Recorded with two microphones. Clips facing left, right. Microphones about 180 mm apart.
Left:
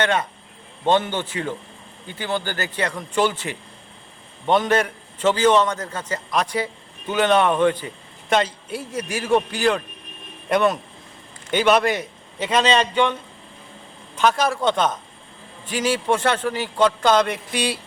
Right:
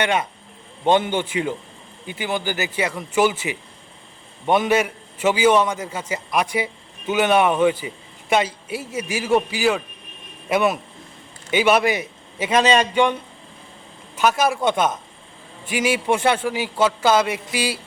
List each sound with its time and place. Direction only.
0.0 s a man's voice: 10° right (ahead or behind)
14.2 s a man's voice: 10° right (ahead or behind)